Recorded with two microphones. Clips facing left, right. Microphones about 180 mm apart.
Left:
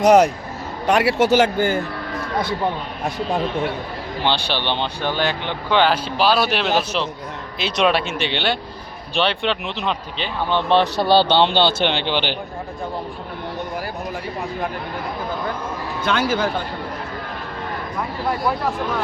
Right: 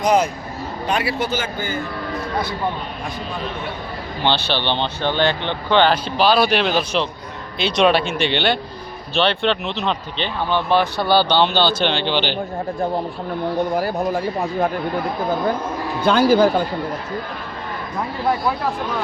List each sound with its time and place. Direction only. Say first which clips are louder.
0.0 s a man's voice: left 4 dB; 75° left (ahead or behind)
4.2 s speech: right 2 dB; 10° left (ahead or behind)
10.5 s speech: left 1 dB; 25° left (ahead or behind)
13.7 s speech: right 7 dB; 40° right (ahead or behind)
16.0 s speech: right 7 dB; 35° right (ahead or behind)